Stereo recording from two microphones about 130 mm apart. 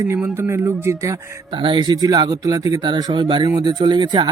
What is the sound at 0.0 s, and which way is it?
Speech, 20° right (ahead or behind).